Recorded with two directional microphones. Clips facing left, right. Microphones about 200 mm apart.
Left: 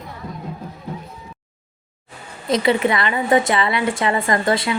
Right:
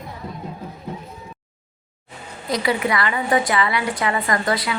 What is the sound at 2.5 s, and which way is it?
A woman's voice, 25° left (ahead or behind).